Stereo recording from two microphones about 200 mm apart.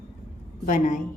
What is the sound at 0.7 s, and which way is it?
Speech, 40° left (ahead or behind).